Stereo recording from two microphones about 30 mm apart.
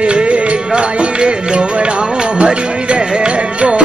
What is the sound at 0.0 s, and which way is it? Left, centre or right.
Music, right.